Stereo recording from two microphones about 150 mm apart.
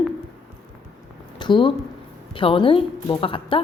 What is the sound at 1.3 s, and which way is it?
A woman's voice, 30° left (ahead or behind).